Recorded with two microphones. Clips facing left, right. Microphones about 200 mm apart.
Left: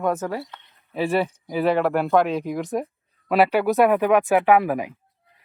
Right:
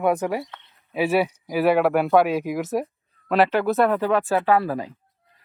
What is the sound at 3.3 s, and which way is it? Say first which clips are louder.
A man's voice: left 1 dB; 10° left (ahead or behind).